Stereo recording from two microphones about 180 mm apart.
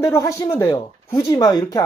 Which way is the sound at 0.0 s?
15° left (ahead or behind).